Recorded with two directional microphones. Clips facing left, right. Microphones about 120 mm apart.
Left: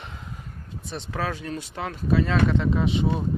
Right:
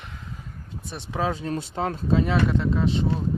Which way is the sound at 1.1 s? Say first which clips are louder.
Right 4 dB; 20° right (ahead or behind).